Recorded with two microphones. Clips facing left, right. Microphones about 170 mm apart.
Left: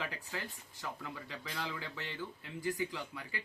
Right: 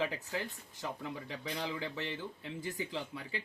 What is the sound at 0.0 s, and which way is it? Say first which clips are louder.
Speech: right 6 dB; 20° right (ahead or behind).